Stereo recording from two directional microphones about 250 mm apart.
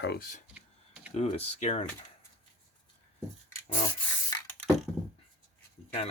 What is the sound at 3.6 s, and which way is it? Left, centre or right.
Rub, centre.